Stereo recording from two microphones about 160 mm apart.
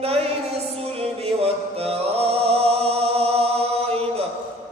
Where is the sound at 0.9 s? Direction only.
40° right (ahead or behind).